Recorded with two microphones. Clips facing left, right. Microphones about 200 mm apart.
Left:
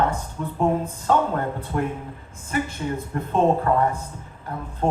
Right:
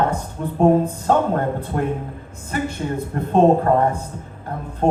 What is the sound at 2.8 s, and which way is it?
Speech, 40° right (ahead or behind).